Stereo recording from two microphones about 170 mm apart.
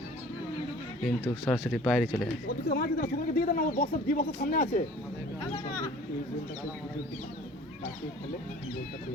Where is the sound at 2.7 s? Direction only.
55° left (ahead or behind).